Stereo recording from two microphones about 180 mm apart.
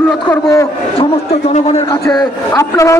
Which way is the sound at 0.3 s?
15° left (ahead or behind).